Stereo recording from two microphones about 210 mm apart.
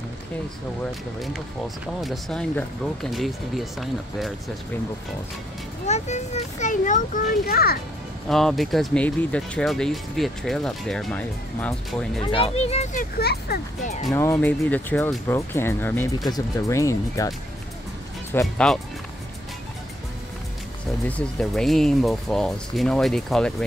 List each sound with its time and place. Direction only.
2.0 s speech: centre (ahead or behind)
5.9 s a child's voice: 35° left (ahead or behind)
8.3 s speech: centre (ahead or behind)
12.2 s speech: 25° left (ahead or behind)
13.2 s speech: 50° left (ahead or behind)
14.1 s speech: 15° left (ahead or behind)
18.3 s speech: 5° left (ahead or behind)
21.2 s speech: 5° left (ahead or behind)